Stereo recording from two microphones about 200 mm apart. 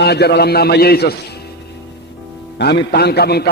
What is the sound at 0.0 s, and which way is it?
A man's voice, 55° left (ahead or behind).